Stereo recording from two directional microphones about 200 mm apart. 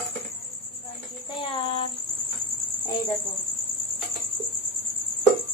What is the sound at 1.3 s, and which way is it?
Speech, 25° left (ahead or behind).